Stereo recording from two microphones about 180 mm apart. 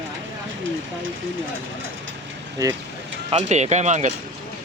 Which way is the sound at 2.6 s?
20° right (ahead or behind).